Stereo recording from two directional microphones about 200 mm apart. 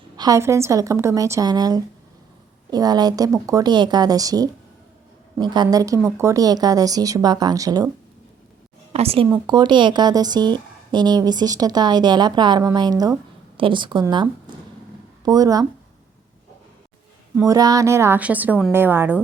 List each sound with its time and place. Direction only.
0.2 s a woman's voice: 15° right (ahead or behind)
8.9 s a woman's voice: 30° right (ahead or behind)
17.3 s speech: 15° right (ahead or behind)